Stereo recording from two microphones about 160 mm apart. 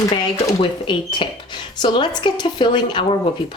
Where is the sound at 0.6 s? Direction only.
30° left (ahead or behind).